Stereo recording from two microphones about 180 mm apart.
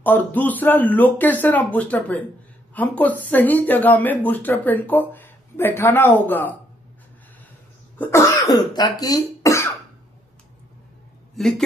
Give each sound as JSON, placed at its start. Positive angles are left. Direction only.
{"t": 0.0, "sound": "speech", "side_deg": 10}
{"t": 8.0, "sound": "speech", "side_deg": 15}
{"t": 11.3, "sound": "speech", "side_deg": 0}